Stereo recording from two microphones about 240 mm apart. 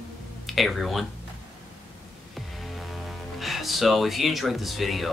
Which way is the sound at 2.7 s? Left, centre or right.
Centre.